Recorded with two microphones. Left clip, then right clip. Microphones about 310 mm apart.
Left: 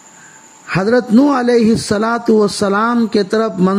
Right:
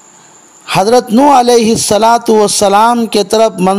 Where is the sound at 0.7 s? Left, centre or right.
Right.